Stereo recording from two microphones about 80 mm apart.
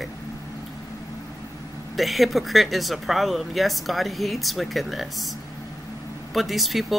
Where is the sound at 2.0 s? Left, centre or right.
Centre.